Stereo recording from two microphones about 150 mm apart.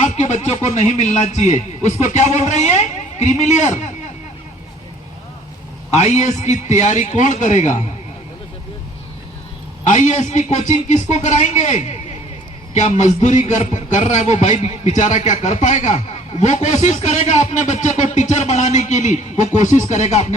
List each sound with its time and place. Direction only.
0.0 s speech: 50° left (ahead or behind)
5.9 s music: 50° left (ahead or behind)
9.8 s music: 55° left (ahead or behind)